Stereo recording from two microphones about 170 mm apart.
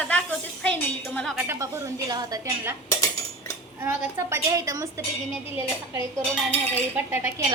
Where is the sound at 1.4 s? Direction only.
15° right (ahead or behind).